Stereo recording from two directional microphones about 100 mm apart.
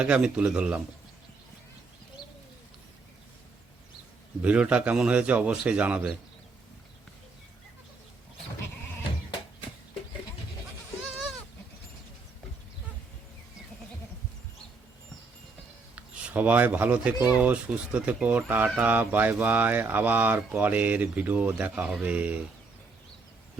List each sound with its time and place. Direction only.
0.0 s speech: 10° right (ahead or behind)
4.4 s speech: 10° right (ahead or behind)
16.0 s speech: 15° right (ahead or behind)